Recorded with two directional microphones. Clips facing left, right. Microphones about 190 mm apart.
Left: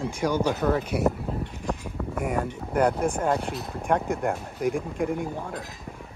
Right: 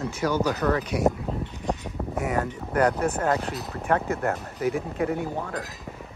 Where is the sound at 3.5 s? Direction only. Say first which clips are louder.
Even; centre (ahead or behind).